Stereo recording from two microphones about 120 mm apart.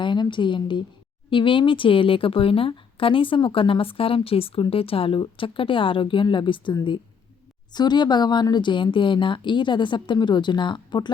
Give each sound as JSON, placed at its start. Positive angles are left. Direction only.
{"t": 0.0, "sound": "a woman's voice", "side_deg": 40}